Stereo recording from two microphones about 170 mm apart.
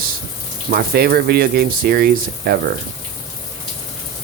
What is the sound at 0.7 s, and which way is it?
Speech, 65° right (ahead or behind).